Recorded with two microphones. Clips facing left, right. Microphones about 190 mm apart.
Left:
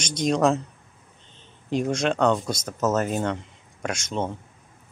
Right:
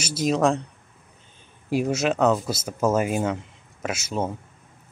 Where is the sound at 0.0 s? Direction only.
5° right (ahead or behind).